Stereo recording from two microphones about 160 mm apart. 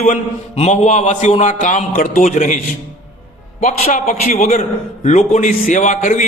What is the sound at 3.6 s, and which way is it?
A man's voice, 55° left (ahead or behind).